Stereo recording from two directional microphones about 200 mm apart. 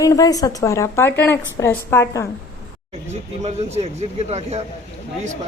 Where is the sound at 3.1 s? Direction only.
35° right (ahead or behind).